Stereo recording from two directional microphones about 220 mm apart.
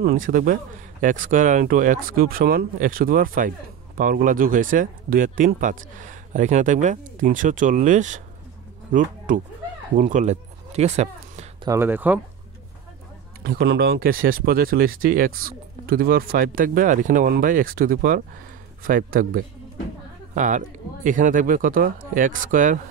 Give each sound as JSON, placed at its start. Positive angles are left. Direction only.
{"t": 0.0, "sound": "speech", "side_deg": -40}
{"t": 11.6, "sound": "speech", "side_deg": -10}
{"t": 13.4, "sound": "speech", "side_deg": -45}